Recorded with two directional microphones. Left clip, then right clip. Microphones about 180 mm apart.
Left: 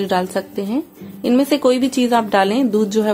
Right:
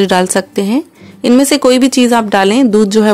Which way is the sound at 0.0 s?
40° right (ahead or behind).